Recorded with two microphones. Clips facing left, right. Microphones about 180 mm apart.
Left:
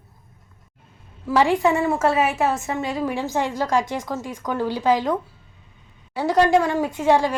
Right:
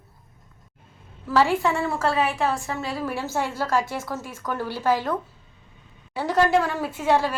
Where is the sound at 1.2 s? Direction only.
15° left (ahead or behind).